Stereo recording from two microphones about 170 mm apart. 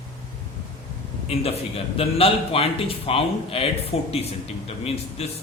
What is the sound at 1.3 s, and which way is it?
A man's voice, 35° left (ahead or behind).